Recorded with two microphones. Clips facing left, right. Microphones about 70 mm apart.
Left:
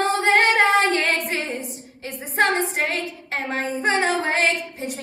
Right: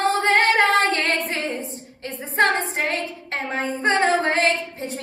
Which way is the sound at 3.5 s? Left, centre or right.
Centre.